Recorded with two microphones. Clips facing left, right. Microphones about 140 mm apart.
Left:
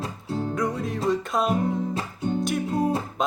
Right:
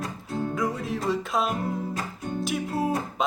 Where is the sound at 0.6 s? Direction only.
Centre (ahead or behind).